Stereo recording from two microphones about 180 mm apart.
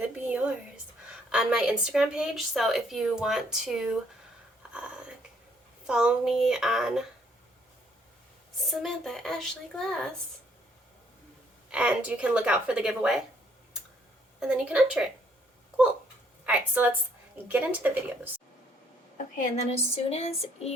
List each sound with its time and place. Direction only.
0.0 s a sound: 10° right (ahead or behind)
1.0 s a woman's voice: 5° right (ahead or behind)
4.7 s a sound: 5° right (ahead or behind)
5.8 s a woman's voice: 5° right (ahead or behind)
8.5 s a woman's voice: centre (ahead or behind)
11.7 s a woman's voice: 5° right (ahead or behind)
14.3 s a woman's voice: 5° right (ahead or behind)
16.5 s a woman's voice: 10° right (ahead or behind)
19.1 s speech: 40° left (ahead or behind)